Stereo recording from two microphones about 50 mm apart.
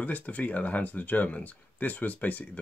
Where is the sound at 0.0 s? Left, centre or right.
Left.